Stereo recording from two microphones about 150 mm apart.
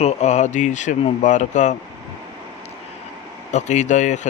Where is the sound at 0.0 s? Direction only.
45° left (ahead or behind).